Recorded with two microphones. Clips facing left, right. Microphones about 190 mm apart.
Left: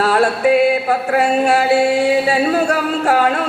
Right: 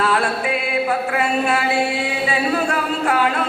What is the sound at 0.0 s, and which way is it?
Music, 40° left (ahead or behind).